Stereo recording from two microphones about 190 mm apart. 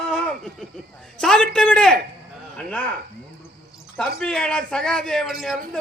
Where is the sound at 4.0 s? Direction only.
5° left (ahead or behind).